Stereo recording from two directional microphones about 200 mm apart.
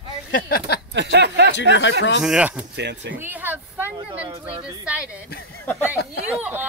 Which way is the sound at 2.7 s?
60° right (ahead or behind).